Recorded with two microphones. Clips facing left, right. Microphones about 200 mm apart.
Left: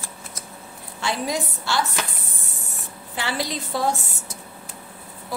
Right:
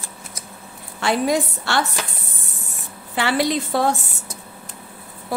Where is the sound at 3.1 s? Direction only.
65° right (ahead or behind).